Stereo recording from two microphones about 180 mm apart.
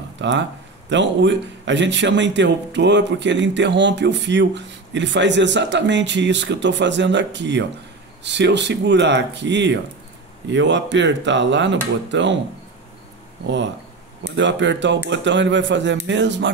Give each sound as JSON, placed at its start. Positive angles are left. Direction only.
{"t": 0.2, "sound": "speech", "side_deg": -80}
{"t": 14.3, "sound": "speech", "side_deg": -85}